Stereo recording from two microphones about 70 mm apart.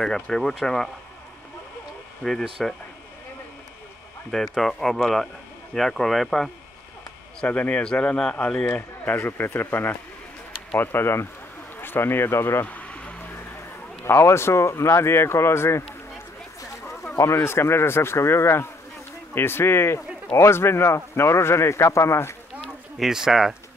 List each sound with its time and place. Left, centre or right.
0.0 s speech: centre
2.2 s speech: centre
4.3 s speech: centre
7.4 s speech: left
8.6 s speech: left
12.6 s a sound: centre
14.0 s speech: left
16.8 s speech: left
22.9 s speech: centre